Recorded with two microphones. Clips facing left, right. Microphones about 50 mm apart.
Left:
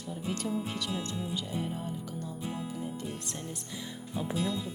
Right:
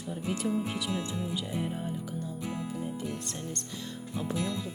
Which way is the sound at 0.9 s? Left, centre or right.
Right.